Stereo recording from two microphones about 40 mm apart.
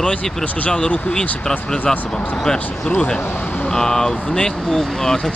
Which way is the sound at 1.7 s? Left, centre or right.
Left.